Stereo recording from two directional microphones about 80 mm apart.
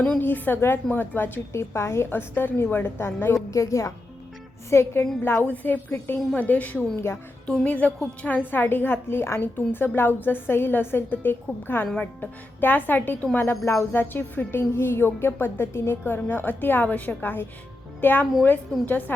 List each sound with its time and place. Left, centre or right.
0.2 s a woman's voice: left
3.5 s a woman's voice: left
7.6 s a woman's voice: centre